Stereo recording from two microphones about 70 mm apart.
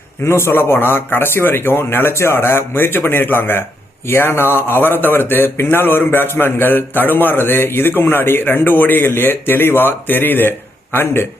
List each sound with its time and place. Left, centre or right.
0.3 s speech: left